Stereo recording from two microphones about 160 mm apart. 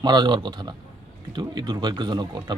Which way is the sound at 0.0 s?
30° right (ahead or behind).